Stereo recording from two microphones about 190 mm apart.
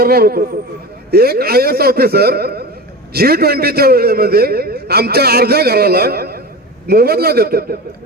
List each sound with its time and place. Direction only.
0.0 s a man's voice: 50° right (ahead or behind)